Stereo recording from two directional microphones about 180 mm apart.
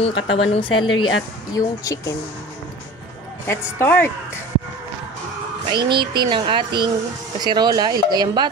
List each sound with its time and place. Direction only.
0.0 s a woman's voice: 30° left (ahead or behind)
3.4 s speech: 15° left (ahead or behind)
5.7 s speech: 25° right (ahead or behind)